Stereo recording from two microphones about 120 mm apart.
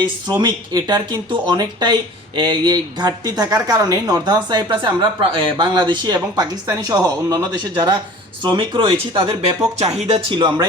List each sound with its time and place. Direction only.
0.0 s speech: 40° right (ahead or behind); by 10.3 s 55° right (ahead or behind)
10.3 s speech: 35° right (ahead or behind)